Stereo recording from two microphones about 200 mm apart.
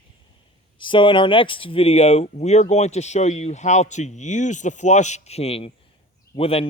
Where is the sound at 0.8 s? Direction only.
25° left (ahead or behind).